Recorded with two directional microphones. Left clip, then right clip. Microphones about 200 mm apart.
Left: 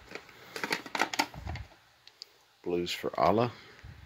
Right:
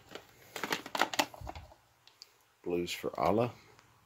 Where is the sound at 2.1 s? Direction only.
Centre (ahead or behind).